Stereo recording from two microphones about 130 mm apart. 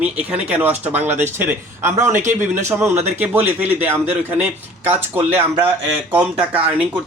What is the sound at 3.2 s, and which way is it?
A man's voice, 15° right (ahead or behind).